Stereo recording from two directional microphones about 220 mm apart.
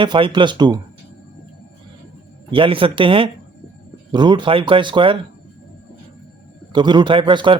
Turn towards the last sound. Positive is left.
turn(degrees=-20)  # may be behind; listen again after turning